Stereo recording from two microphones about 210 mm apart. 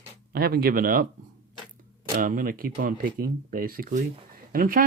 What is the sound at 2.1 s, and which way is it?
Speech, 40° right (ahead or behind).